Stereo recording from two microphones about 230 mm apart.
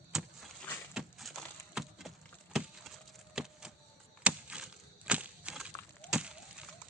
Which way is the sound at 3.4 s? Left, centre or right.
Centre.